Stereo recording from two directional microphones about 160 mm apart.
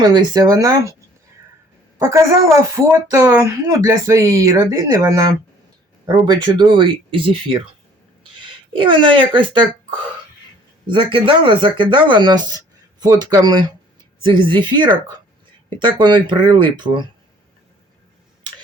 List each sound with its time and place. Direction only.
0.0 s a woman's voice: 25° right (ahead or behind)
2.0 s a woman's voice: 20° right (ahead or behind)
10.8 s a woman's voice: 30° right (ahead or behind)